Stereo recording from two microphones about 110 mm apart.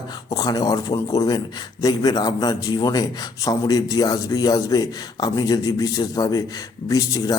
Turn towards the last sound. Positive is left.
turn(degrees=35)  # may be behind; listen again after turning